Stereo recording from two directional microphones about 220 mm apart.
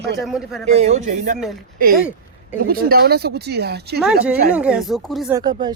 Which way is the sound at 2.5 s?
40° right (ahead or behind).